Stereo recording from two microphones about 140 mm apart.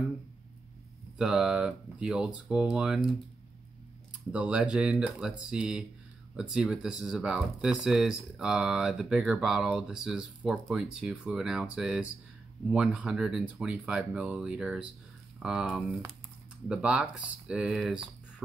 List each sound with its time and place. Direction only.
1.1 s speech: 5° right (ahead or behind)
4.3 s speech: 10° right (ahead or behind)